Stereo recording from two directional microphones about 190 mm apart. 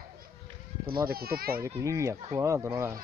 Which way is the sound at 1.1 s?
55° right (ahead or behind).